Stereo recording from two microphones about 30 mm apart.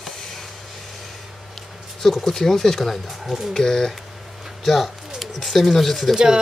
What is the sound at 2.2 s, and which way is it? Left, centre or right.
Speech, centre.